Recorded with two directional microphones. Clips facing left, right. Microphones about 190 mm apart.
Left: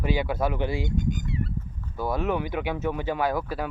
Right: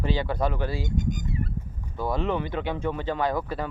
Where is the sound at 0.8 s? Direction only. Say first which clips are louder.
Left 1 dB; 45° right (ahead or behind).